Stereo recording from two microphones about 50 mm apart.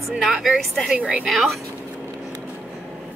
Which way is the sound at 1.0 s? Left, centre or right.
Right.